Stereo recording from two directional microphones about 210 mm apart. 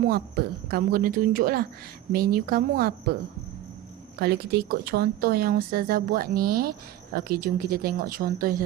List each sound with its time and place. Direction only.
0.0 s a woman's voice: 50° right (ahead or behind)
4.2 s a woman's voice: 50° right (ahead or behind)